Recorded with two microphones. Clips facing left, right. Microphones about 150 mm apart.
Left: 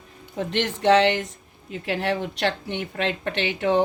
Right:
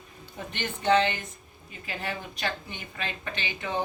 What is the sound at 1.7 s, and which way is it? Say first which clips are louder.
Speech: left 10 dB; 75° left (ahead or behind).